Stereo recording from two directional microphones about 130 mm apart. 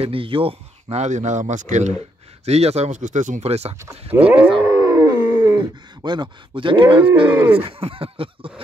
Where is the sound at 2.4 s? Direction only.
55° right (ahead or behind); by 3.4 s 75° right (ahead or behind).